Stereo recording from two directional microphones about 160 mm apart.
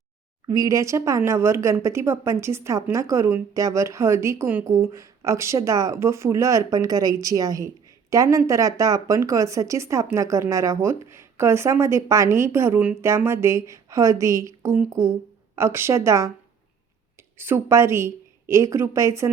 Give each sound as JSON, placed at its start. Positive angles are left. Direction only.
{"t": 0.4, "sound": "a woman's voice", "side_deg": -20}
{"t": 17.3, "sound": "a woman's voice", "side_deg": -15}